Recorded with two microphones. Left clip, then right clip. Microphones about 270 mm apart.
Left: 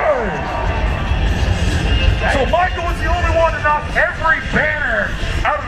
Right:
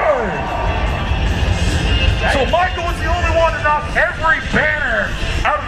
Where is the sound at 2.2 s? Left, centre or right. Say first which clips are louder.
Even; centre.